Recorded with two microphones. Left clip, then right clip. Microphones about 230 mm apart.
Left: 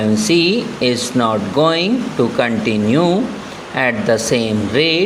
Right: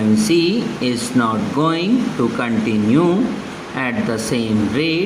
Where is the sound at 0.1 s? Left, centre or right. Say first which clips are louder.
Left 1 dB; left.